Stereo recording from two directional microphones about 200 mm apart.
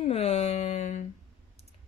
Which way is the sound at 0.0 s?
30° left (ahead or behind).